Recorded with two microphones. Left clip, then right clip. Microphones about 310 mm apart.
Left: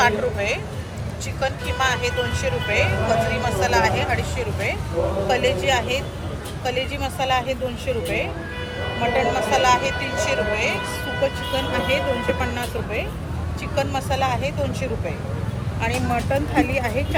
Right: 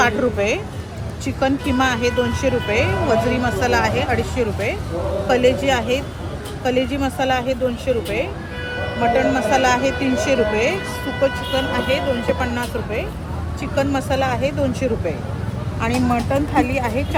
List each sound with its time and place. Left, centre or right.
1.4 s speech: right